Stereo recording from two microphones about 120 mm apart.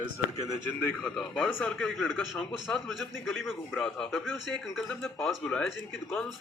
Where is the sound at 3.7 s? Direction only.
10° left (ahead or behind).